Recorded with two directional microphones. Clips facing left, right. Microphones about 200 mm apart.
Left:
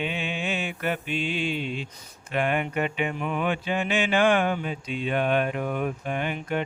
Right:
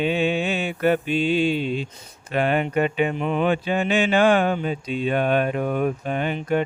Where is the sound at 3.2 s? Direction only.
25° right (ahead or behind).